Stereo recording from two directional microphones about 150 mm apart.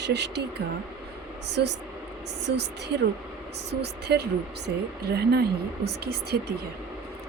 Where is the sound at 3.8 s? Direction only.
90° right.